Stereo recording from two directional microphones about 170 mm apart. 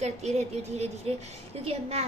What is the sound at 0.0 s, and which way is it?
A woman's voice, 40° right (ahead or behind).